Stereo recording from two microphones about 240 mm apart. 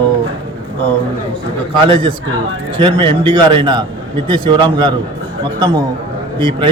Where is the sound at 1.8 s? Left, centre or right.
Right.